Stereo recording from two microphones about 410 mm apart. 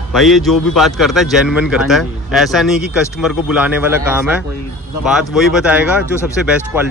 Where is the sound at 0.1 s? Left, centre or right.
Centre.